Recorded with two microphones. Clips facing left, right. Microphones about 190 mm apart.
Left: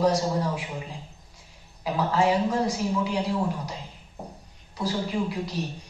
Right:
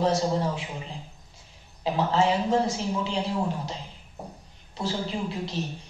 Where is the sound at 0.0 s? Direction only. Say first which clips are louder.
Left 1 dB; 25° right (ahead or behind).